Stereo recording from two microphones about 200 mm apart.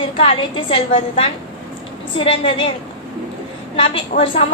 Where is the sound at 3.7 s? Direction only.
25° left (ahead or behind).